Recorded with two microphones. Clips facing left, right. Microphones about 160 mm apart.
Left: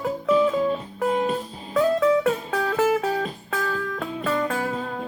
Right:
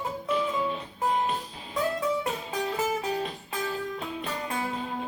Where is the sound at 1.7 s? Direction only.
60° left (ahead or behind).